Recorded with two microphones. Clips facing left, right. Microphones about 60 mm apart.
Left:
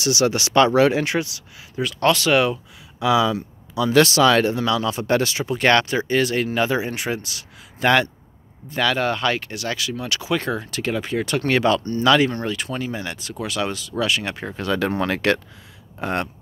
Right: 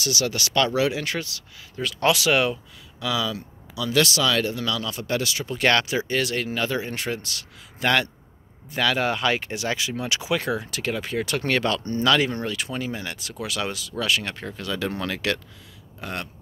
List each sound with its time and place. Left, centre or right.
0.0 s speech: left
0.7 s speech: left
1.0 s speech: centre
2.0 s speech: centre
3.0 s speech: left
3.7 s speech: left
5.5 s speech: centre
10.3 s speech: centre
14.6 s speech: left